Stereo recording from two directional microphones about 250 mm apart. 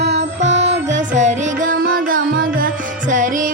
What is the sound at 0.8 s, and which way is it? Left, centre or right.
Music, right.